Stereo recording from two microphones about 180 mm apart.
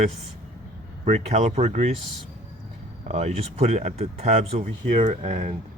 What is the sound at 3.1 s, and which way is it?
Speech, 35° right (ahead or behind).